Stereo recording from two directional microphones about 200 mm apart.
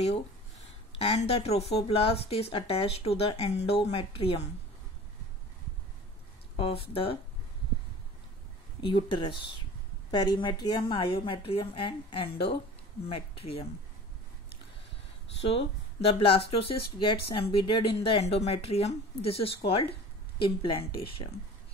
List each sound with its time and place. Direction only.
0.9 s speech: 30° left (ahead or behind)
6.5 s speech: 30° left (ahead or behind)
8.8 s speech: 25° left (ahead or behind)
16.1 s speech: 30° left (ahead or behind)